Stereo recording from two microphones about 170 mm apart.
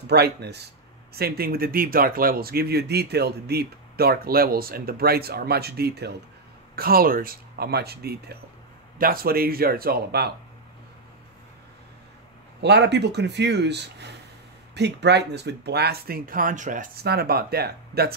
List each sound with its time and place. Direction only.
0.1 s speech: 75° right (ahead or behind)
1.1 s speech: 65° right (ahead or behind)
12.6 s speech: 85° right; by 18.1 s 70° right (ahead or behind)